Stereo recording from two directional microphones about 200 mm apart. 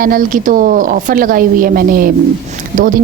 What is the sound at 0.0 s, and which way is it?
Speech, 45° right (ahead or behind).